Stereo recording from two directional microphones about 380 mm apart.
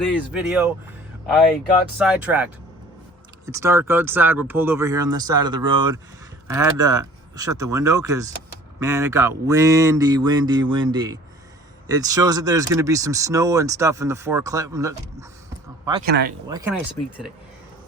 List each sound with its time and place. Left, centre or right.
0.1 s speech: centre
2.0 s speech: centre
16.0 s speech: right
16.5 s speech: centre